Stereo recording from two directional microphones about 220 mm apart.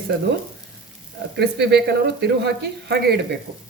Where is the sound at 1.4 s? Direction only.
50° right (ahead or behind).